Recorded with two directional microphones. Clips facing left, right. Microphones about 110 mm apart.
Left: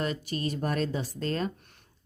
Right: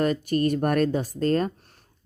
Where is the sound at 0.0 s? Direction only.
50° right (ahead or behind).